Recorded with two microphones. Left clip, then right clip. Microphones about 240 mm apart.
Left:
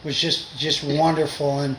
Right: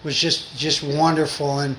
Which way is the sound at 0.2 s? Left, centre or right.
Right.